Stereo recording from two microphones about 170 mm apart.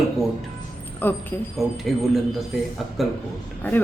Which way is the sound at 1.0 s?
10° left (ahead or behind).